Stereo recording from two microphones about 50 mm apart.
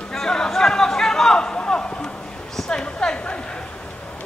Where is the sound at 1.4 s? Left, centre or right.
Centre.